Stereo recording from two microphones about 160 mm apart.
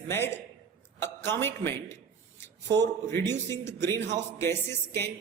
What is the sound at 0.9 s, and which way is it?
Speech, 15° left (ahead or behind).